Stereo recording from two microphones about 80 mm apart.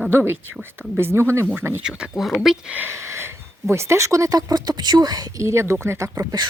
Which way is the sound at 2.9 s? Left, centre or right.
Right.